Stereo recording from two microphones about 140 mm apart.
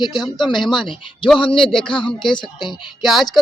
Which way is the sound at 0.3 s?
35° left (ahead or behind).